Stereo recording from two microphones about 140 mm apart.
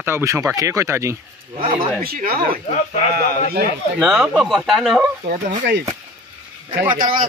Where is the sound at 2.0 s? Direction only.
90° right.